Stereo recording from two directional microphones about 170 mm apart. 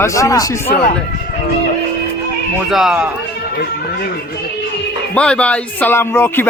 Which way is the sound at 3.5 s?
65° left (ahead or behind).